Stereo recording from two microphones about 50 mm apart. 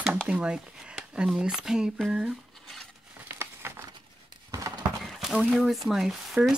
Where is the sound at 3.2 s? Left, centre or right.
Right.